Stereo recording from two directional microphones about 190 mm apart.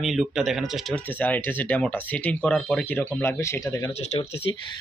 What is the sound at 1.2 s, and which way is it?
Speech, 10° left (ahead or behind).